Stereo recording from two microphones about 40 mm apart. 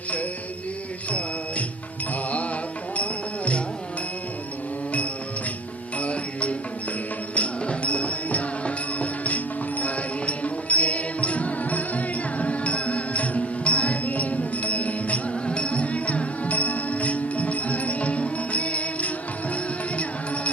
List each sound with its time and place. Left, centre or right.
2.9 s music: left
6.0 s music: left